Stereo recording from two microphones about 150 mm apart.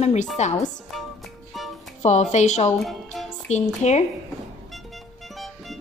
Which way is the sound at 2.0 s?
50° left (ahead or behind).